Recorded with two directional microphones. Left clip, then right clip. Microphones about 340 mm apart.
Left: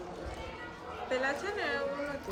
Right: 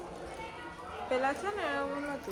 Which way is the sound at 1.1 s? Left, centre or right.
Centre.